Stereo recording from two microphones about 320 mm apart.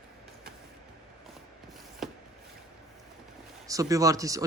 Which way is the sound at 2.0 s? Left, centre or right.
Centre.